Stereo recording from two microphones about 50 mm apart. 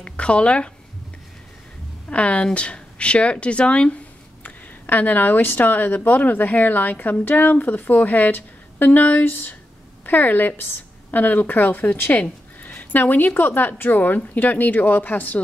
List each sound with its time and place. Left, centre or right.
0.0 s speech: left
2.0 s a woman's voice: left
4.4 s speech: left